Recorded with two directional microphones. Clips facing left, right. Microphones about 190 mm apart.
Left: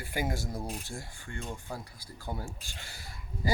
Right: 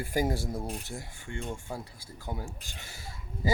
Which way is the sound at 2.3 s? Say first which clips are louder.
Right 1 dB; 20° right (ahead or behind).